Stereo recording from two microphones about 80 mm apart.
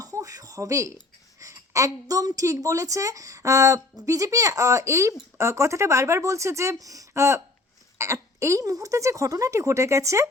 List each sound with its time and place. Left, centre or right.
0.0 s a sound: right
1.4 s a woman's voice: right
7.1 s speech: right